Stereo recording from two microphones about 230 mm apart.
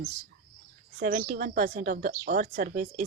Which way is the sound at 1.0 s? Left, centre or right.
Right.